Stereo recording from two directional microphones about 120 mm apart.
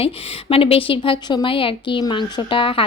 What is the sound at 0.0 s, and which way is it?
Speech, 50° left (ahead or behind).